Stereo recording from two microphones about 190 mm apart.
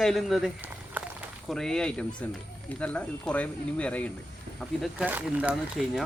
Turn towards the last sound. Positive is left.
turn(degrees=-5)  # may be behind; listen again after turning